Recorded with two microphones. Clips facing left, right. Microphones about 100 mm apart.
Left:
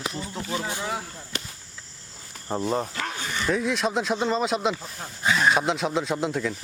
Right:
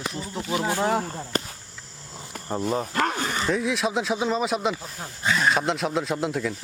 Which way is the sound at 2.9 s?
50° right (ahead or behind).